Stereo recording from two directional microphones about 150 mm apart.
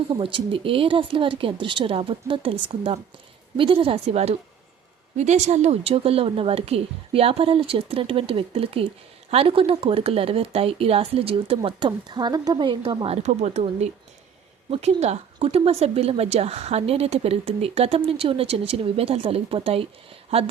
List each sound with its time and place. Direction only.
0.1 s a woman's voice: 35° right (ahead or behind)
13.2 s a woman's voice: 50° right (ahead or behind)